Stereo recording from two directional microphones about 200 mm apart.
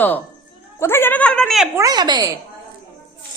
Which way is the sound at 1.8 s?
20° right (ahead or behind).